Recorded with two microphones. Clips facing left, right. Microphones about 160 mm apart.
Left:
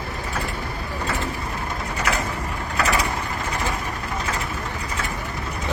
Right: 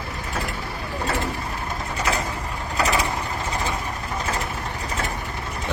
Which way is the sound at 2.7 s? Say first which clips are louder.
Even; 20° right (ahead or behind).